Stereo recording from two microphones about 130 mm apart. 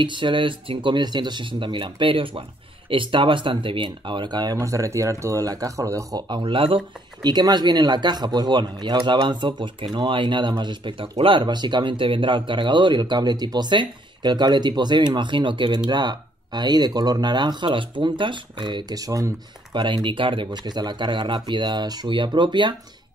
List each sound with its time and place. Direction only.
0.0 s speech: 40° right (ahead or behind)
19.7 s speech: 35° right (ahead or behind)